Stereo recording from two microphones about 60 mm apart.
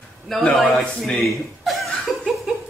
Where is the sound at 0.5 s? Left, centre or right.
Centre.